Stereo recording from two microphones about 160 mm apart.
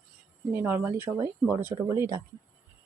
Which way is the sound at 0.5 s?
10° right (ahead or behind).